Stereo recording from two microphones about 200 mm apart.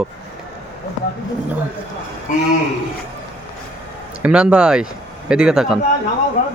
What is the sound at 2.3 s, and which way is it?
Speech, 40° left (ahead or behind).